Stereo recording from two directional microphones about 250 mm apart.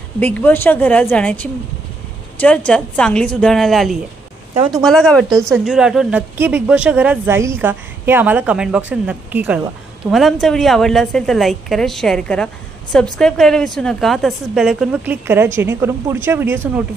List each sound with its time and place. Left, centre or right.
0.2 s a woman's voice: centre
4.6 s a woman's voice: centre
4.8 s a woman's voice: centre